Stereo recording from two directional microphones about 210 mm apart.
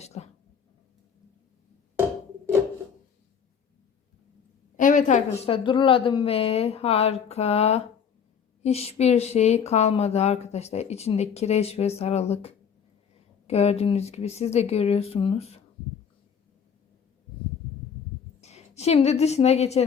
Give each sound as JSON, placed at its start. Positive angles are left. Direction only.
{"t": 0.0, "sound": "a sound", "side_deg": 30}
{"t": 4.8, "sound": "a woman's voice", "side_deg": 35}
{"t": 18.3, "sound": "a woman's voice", "side_deg": 30}